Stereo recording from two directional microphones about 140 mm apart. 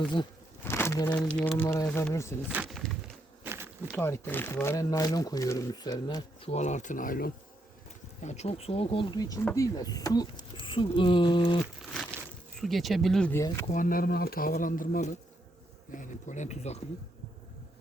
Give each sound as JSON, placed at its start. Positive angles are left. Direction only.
{"t": 0.6, "sound": "a sound", "side_deg": 20}
{"t": 1.3, "sound": "speech", "side_deg": 5}
{"t": 1.5, "sound": "speech", "side_deg": 15}
{"t": 2.6, "sound": "a sound", "side_deg": 0}
{"t": 3.4, "sound": "insect", "side_deg": -15}
{"t": 3.9, "sound": "speech", "side_deg": 15}
{"t": 6.4, "sound": "speech", "side_deg": 50}
{"t": 8.2, "sound": "speech", "side_deg": 55}
{"t": 9.1, "sound": "speech", "side_deg": 25}
{"t": 11.8, "sound": "a sound", "side_deg": 5}
{"t": 13.3, "sound": "speech", "side_deg": 20}
{"t": 13.7, "sound": "speech", "side_deg": 75}
{"t": 15.9, "sound": "speech", "side_deg": 65}